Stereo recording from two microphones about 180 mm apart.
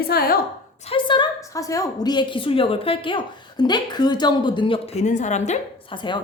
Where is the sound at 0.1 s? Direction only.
55° left (ahead or behind).